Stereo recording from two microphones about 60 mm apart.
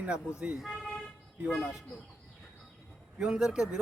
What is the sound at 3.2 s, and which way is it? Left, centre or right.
Speech, centre.